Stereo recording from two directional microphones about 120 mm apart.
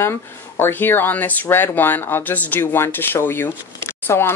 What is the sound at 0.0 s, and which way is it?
Speech, 20° left (ahead or behind).